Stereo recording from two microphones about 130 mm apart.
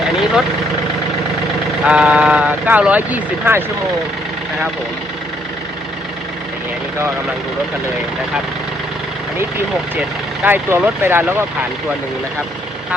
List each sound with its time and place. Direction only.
1.8 s speech: 10° right (ahead or behind)
10.4 s speech: 15° right (ahead or behind)